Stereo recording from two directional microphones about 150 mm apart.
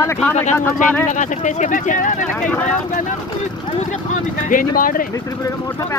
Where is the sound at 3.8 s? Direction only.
55° left (ahead or behind).